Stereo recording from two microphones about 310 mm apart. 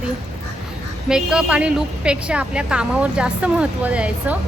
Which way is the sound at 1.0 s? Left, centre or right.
Centre.